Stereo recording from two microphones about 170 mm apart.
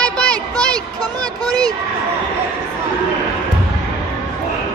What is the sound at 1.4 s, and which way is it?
Speech, 20° right (ahead or behind).